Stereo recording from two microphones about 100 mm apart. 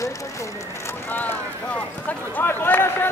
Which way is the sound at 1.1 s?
15° left (ahead or behind).